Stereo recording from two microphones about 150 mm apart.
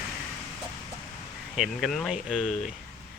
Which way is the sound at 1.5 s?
Centre (ahead or behind).